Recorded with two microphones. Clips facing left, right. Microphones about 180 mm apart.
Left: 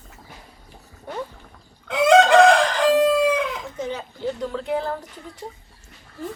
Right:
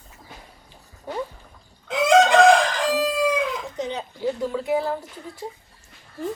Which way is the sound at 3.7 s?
20° right (ahead or behind).